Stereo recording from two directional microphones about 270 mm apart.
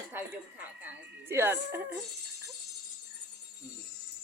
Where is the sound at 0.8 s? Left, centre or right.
Centre.